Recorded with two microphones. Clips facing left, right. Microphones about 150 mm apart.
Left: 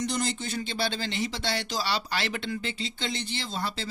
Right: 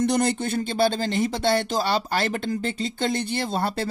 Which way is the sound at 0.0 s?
60° right (ahead or behind).